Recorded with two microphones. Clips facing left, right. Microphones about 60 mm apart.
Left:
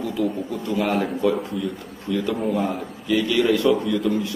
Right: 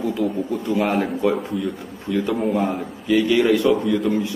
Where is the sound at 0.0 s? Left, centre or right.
Centre.